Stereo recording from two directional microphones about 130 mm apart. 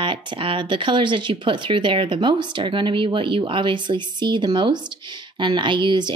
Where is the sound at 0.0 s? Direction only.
40° right (ahead or behind).